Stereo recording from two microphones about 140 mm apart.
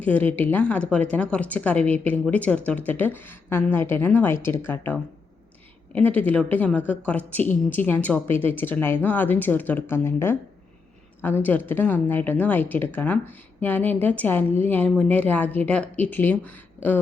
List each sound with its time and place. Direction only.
0.0 s speech: 10° left (ahead or behind)